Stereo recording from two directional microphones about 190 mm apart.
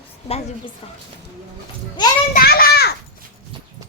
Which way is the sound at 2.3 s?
55° left (ahead or behind).